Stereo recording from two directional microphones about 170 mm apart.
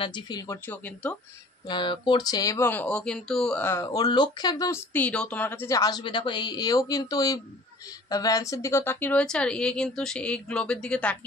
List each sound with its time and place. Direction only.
0.0 s speech: 25° left (ahead or behind)
0.7 s speech: 10° left (ahead or behind)
1.7 s a woman's voice: 25° left (ahead or behind); by 11.1 s 5° left (ahead or behind)